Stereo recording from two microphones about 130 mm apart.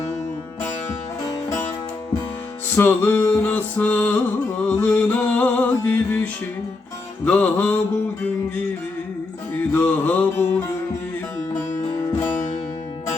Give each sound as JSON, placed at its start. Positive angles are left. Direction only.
{"t": 1.3, "sound": "music", "side_deg": 25}
{"t": 2.7, "sound": "music", "side_deg": 15}
{"t": 7.3, "sound": "music", "side_deg": 10}
{"t": 9.7, "sound": "mantra", "side_deg": 15}